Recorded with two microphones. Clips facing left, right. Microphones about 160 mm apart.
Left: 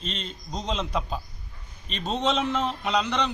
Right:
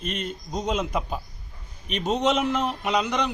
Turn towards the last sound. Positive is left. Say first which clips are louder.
# right 1 dB
turn(degrees=-10)  # may be behind; listen again after turning